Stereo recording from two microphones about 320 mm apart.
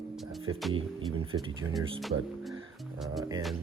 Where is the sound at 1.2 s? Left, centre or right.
Centre.